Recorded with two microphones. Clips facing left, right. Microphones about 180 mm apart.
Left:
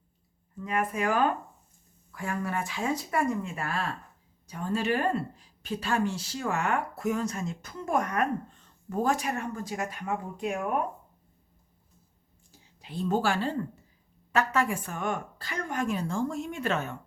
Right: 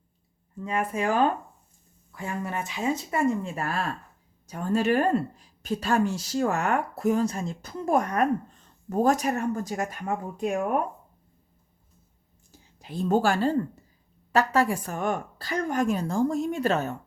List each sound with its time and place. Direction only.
0.6 s speech: 30° right (ahead or behind)
4.4 s speech: 45° right (ahead or behind)
12.5 s speech: 45° right (ahead or behind)